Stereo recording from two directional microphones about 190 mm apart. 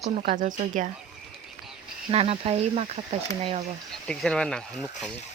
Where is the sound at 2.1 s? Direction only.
30° right (ahead or behind).